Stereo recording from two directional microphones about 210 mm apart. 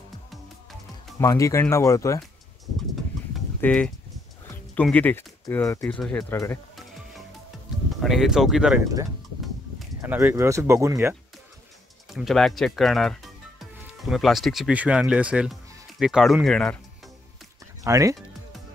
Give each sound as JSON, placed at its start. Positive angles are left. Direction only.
{"t": 1.2, "sound": "speech", "side_deg": 15}
{"t": 3.3, "sound": "a sound", "side_deg": 5}
{"t": 4.7, "sound": "speech", "side_deg": 5}
{"t": 8.0, "sound": "speech", "side_deg": 0}
{"t": 9.4, "sound": "a sound", "side_deg": 0}
{"t": 10.1, "sound": "speech", "side_deg": -10}
{"t": 12.1, "sound": "speech", "side_deg": 0}
{"t": 17.8, "sound": "speech", "side_deg": -15}